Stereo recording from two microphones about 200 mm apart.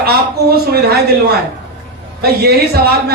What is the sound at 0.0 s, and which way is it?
Speech, 50° right (ahead or behind).